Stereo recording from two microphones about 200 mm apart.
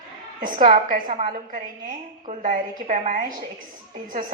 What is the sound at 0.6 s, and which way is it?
A woman's voice, 40° right (ahead or behind).